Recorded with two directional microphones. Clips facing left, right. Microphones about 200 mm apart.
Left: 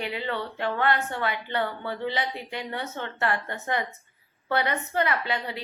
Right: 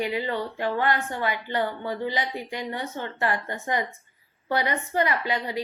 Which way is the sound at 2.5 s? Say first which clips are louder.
Right 2 dB; 60° left (ahead or behind).